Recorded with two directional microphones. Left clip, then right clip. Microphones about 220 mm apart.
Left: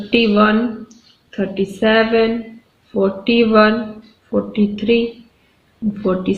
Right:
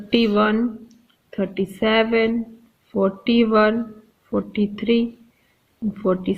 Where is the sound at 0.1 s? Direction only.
45° right (ahead or behind).